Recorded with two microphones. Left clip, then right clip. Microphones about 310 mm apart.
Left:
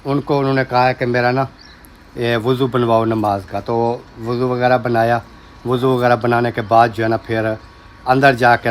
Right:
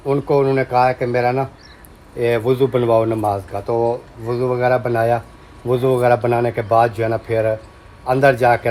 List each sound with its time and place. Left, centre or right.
0.1 s speech: centre
3.2 s speech: left
4.5 s speech: centre